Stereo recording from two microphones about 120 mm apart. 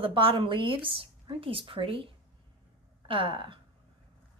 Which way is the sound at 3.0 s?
45° right (ahead or behind).